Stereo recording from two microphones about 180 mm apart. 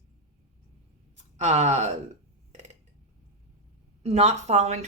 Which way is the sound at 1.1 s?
40° right (ahead or behind).